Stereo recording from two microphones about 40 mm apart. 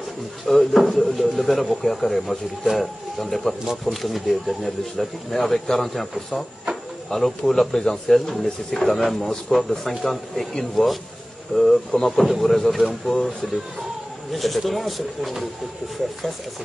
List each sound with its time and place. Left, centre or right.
0.5 s speech: centre